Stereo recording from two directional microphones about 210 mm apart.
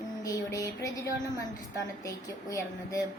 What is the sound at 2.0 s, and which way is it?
Speech, 15° left (ahead or behind).